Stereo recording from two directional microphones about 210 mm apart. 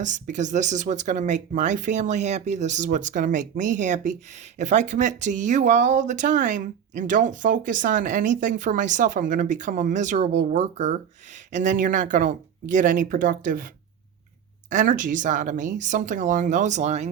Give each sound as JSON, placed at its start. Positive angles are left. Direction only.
{"t": 0.0, "sound": "speech", "side_deg": -35}
{"t": 14.7, "sound": "speech", "side_deg": -35}